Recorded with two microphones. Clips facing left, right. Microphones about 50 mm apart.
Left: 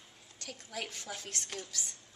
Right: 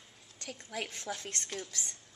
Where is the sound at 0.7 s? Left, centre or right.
Centre.